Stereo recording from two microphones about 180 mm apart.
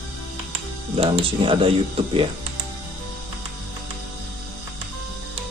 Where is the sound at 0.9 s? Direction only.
30° right (ahead or behind).